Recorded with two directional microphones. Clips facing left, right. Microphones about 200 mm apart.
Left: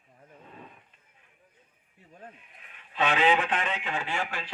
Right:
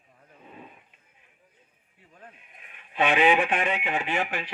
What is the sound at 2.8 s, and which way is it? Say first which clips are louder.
Speech: right 3 dB; 15° right (ahead or behind).